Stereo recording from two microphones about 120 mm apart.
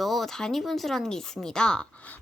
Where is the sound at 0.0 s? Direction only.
Centre (ahead or behind).